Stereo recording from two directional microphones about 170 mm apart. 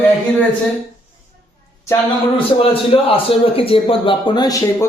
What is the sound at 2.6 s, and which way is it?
A man's voice, 35° left (ahead or behind).